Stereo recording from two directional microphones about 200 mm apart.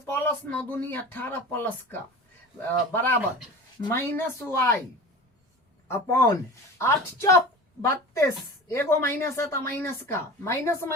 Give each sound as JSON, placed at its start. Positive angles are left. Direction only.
{"t": 0.0, "sound": "a woman's voice", "side_deg": 10}
{"t": 5.9, "sound": "a woman's voice", "side_deg": 15}